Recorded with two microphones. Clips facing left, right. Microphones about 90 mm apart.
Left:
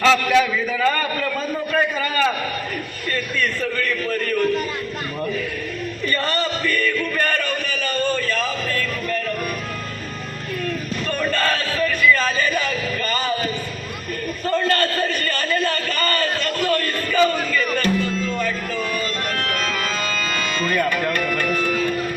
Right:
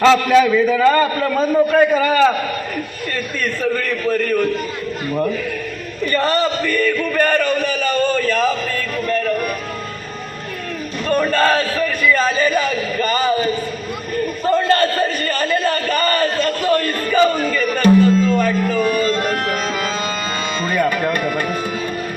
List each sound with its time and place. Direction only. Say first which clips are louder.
0.0 s a man's voice: right 5 dB; 30° right (ahead or behind)
6.1 s a man's voice: right 7 dB; 25° right (ahead or behind)
6.7 s a man's voice: right 4 dB; 35° right (ahead or behind)
11.1 s a man's voice: right 7 dB; 40° right (ahead or behind)
11.9 s a man's voice: left 1 dB; 30° right (ahead or behind)
17.3 s a man's voice: right 3 dB; 40° right (ahead or behind)
17.7 s music: right 9 dB; 25° right (ahead or behind)
18.8 s music: right 8 dB; 30° right (ahead or behind)